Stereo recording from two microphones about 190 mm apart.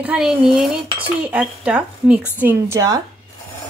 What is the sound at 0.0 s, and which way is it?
Dishes, 5° right (ahead or behind).